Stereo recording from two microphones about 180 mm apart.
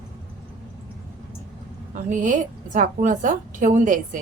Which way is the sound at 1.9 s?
45° right (ahead or behind).